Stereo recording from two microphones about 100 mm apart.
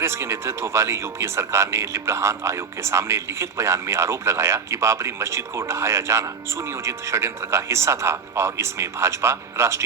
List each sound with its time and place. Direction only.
0.0 s speech: 25° right (ahead or behind)